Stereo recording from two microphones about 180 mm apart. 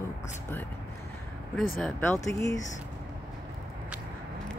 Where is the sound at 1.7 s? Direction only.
10° left (ahead or behind).